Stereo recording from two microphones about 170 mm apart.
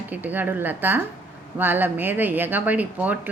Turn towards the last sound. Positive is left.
turn(degrees=-10)  # may be behind; listen again after turning